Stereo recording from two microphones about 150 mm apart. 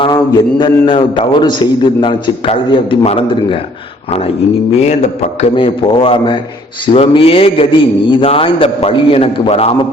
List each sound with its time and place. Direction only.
0.6 s a man's voice: 35° left (ahead or behind)
4.8 s mantra: 50° left (ahead or behind)
5.5 s a man's voice: 35° left (ahead or behind)